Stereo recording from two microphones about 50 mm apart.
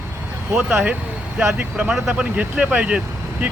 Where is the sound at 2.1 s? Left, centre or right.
Right.